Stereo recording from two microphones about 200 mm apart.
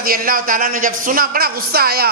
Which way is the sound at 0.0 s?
45° right (ahead or behind).